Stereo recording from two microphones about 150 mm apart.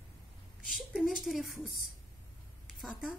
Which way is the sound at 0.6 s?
Centre (ahead or behind).